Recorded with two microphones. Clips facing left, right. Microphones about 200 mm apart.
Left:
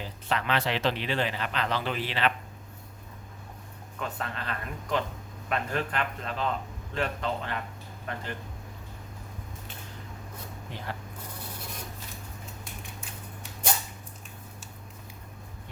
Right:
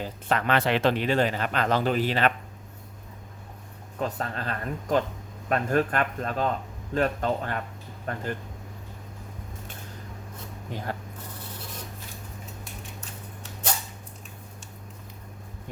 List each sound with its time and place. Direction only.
0.0 s speech: 50° right (ahead or behind)
4.0 s speech: 40° right (ahead or behind)
10.7 s speech: 45° right (ahead or behind)